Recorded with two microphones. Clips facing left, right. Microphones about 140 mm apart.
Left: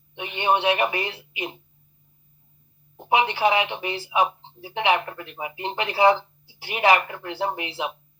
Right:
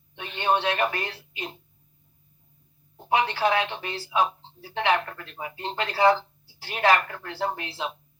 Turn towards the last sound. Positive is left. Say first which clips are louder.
# left 2 dB
turn(degrees=15)  # may be behind; listen again after turning